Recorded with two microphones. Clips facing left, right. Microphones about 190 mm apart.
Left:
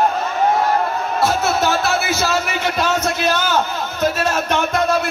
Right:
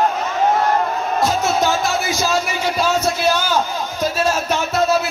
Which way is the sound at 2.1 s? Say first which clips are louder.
Even; 60° left (ahead or behind).